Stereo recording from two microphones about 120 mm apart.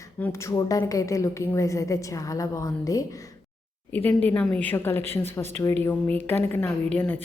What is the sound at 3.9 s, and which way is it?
A woman's voice, 15° left (ahead or behind).